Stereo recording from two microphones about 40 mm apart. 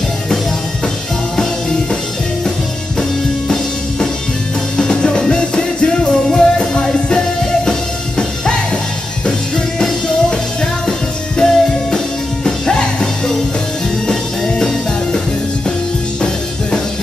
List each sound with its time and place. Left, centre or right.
1.3 s music: centre
4.7 s music: centre
10.6 s music: centre